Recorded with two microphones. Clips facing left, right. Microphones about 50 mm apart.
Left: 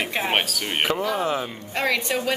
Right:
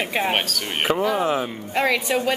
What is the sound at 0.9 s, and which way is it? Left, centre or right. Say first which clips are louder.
A woman's voice: right 5 dB; centre.